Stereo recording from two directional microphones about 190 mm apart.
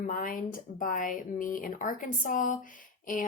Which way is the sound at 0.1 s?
45° left (ahead or behind).